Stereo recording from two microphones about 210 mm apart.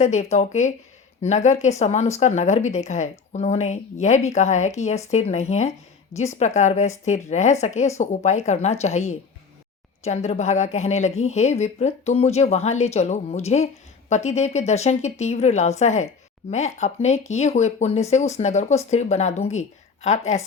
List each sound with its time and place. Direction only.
0.0 s speech: 35° left (ahead or behind)